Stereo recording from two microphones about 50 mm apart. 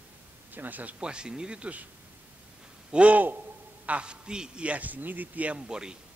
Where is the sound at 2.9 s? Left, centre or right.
Right.